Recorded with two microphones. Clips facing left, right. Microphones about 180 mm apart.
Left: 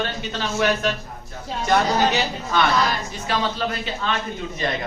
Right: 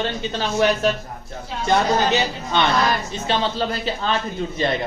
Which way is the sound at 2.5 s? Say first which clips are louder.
Right 1 dB; 25° right (ahead or behind).